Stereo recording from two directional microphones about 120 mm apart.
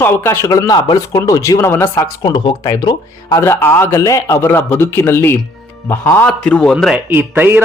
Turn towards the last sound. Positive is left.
turn(degrees=-15)  # may be behind; listen again after turning